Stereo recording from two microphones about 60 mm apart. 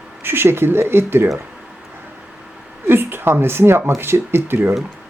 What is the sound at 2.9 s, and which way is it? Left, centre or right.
Speech, right.